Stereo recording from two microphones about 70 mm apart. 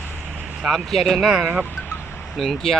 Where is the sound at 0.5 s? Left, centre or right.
Centre.